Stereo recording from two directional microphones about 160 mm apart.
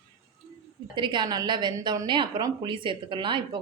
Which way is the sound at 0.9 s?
30° right (ahead or behind).